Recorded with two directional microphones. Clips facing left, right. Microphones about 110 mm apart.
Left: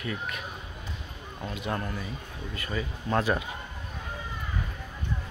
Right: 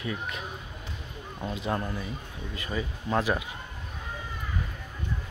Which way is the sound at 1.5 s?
25° right (ahead or behind).